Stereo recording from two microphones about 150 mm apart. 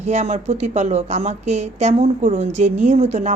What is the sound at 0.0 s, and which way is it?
A woman's voice, 50° right (ahead or behind).